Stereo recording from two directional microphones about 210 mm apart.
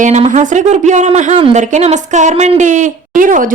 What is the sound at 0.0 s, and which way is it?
A woman's voice, 35° right (ahead or behind).